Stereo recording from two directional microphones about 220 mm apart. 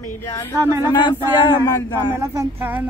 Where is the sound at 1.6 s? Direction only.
15° left (ahead or behind).